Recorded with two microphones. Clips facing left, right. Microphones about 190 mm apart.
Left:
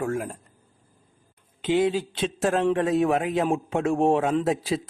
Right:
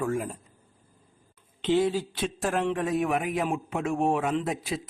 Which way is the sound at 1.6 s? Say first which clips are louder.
Left 2 dB; 15° left (ahead or behind).